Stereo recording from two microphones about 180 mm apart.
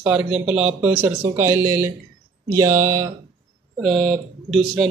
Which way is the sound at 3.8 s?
Centre (ahead or behind).